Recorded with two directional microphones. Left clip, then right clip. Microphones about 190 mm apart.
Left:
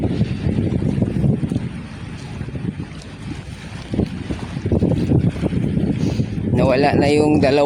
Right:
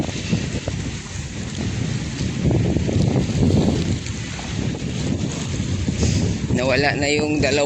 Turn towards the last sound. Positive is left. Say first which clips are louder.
# left 5 dB
turn(degrees=25)  # may be behind; listen again after turning